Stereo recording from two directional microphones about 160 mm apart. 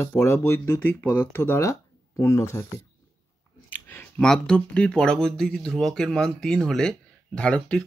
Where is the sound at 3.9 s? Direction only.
5° left (ahead or behind).